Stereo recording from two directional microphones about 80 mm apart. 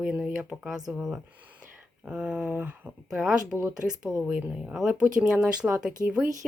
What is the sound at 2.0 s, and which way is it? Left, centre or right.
Speech, centre.